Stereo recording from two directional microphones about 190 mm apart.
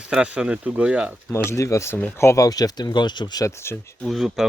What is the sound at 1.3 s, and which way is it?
Speech, 15° left (ahead or behind).